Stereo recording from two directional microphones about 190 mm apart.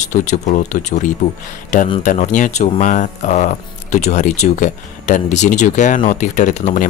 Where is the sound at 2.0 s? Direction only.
40° left (ahead or behind).